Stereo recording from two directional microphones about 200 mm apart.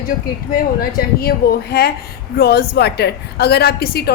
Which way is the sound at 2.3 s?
50° left (ahead or behind).